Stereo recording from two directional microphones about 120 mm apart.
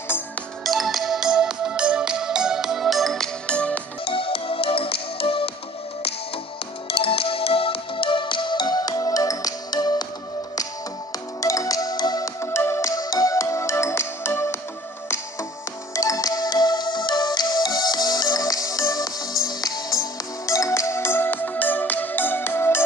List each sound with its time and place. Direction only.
0.7 s music: centre (ahead or behind)
4.0 s music: 50° left (ahead or behind)
6.9 s music: 50° left (ahead or behind); by 10.0 s 35° left (ahead or behind)
11.4 s music: 30° left (ahead or behind)
12.4 s music: 20° left (ahead or behind)
15.9 s music: 25° left (ahead or behind)